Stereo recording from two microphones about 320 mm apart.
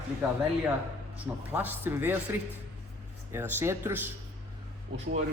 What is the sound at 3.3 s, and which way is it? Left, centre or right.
Speech, centre.